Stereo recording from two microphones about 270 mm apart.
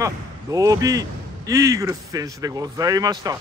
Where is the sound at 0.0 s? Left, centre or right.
Centre.